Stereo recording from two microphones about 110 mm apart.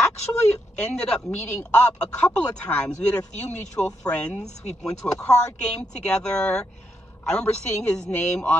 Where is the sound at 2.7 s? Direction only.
25° left (ahead or behind).